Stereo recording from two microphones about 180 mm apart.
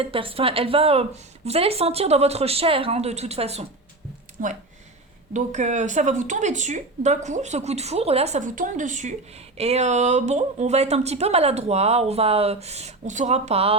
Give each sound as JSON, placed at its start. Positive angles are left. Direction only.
{"t": 0.0, "sound": "speech", "side_deg": -30}
{"t": 4.4, "sound": "speech", "side_deg": -50}